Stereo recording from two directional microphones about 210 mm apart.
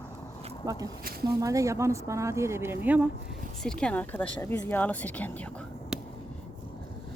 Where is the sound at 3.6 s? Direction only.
5° left (ahead or behind).